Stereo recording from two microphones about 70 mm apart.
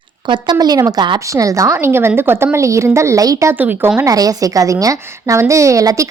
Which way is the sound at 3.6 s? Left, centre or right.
Right.